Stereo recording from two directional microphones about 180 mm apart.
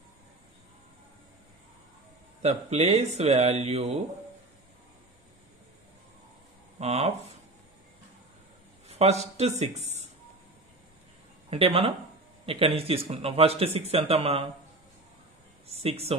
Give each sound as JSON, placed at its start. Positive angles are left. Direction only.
{"t": 2.4, "sound": "speech", "side_deg": -35}
{"t": 6.8, "sound": "speech", "side_deg": -35}
{"t": 8.8, "sound": "speech", "side_deg": -35}
{"t": 11.5, "sound": "speech", "side_deg": -30}
{"t": 15.6, "sound": "speech", "side_deg": -35}